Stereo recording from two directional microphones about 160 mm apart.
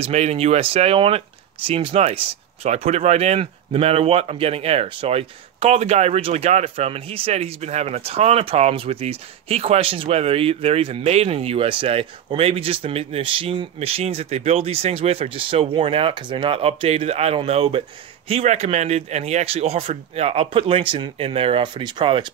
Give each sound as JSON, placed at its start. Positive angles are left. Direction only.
{"t": 0.0, "sound": "speech", "side_deg": -40}